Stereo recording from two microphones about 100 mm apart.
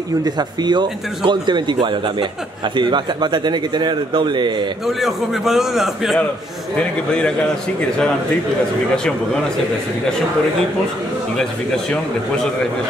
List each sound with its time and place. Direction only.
0.2 s speech: 45° right (ahead or behind)
4.8 s a man's voice: 5° right (ahead or behind)
6.8 s a man's voice: 10° left (ahead or behind)
8.9 s a man's voice: 5° left (ahead or behind)